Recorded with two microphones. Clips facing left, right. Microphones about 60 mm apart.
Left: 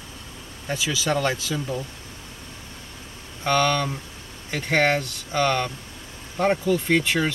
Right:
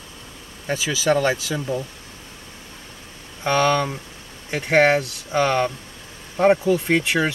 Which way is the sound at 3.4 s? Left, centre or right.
Centre.